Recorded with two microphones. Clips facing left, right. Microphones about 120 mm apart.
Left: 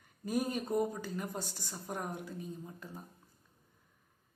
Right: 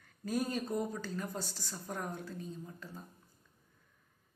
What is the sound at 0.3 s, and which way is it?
A woman's voice, 15° left (ahead or behind).